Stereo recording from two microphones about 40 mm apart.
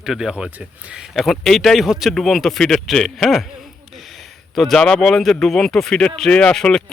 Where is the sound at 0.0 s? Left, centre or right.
Centre.